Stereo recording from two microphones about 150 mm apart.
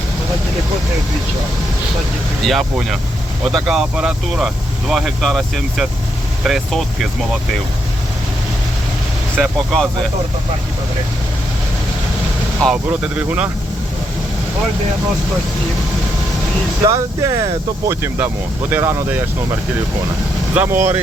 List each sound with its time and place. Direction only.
2.4 s speech: centre (ahead or behind)
9.4 s speech: centre (ahead or behind)
12.6 s speech: 5° right (ahead or behind)
16.8 s speech: 25° right (ahead or behind)
20.5 s speech: 15° right (ahead or behind)